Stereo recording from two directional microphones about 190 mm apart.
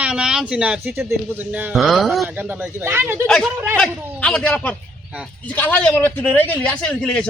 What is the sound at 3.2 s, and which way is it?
A man's voice, 5° left (ahead or behind).